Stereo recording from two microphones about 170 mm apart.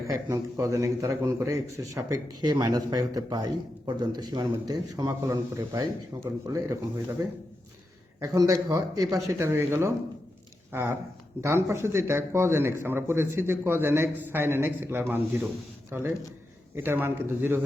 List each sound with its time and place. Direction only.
0.1 s a man's voice: 15° right (ahead or behind)
8.2 s a man's voice: 20° right (ahead or behind)